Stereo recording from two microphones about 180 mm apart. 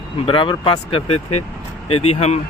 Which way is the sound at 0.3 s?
30° left (ahead or behind).